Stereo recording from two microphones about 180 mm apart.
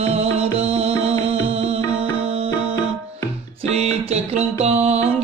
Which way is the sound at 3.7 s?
35° right (ahead or behind).